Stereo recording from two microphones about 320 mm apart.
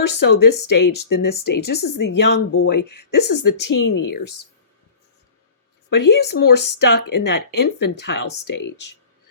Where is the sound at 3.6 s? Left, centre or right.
Left.